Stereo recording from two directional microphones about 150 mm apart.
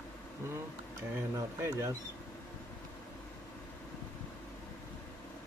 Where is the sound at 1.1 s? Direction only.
15° right (ahead or behind).